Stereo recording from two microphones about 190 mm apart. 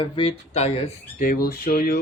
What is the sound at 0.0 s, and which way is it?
Speech, 30° left (ahead or behind).